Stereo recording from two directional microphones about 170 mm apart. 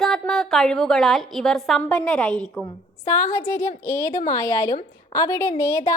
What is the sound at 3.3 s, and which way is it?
A woman's voice, 20° left (ahead or behind).